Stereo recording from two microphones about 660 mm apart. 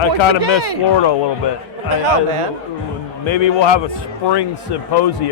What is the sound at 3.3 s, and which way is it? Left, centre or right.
A man's voice, left.